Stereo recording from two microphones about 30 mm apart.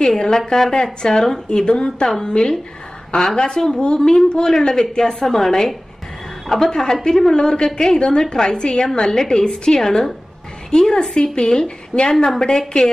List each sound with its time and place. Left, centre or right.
0.0 s a woman's voice: left
1.7 s a woman's voice: left
5.2 s a woman's voice: centre
6.7 s speech: centre
7.3 s a woman's voice: left